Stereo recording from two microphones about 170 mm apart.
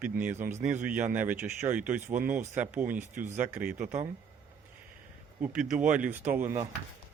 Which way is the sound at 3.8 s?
50° right (ahead or behind).